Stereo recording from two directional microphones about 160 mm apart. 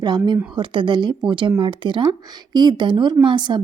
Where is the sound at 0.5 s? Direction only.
30° right (ahead or behind).